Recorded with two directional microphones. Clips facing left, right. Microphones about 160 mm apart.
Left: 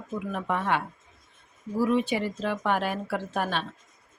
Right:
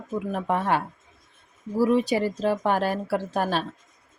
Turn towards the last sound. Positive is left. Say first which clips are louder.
# right 4 dB
turn(degrees=-40)  # may be behind; listen again after turning